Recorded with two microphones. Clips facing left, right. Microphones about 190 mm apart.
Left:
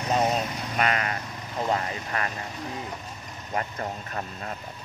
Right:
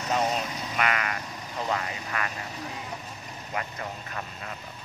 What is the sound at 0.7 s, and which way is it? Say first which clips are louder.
Vehicle: left 2 dB; 35° left (ahead or behind).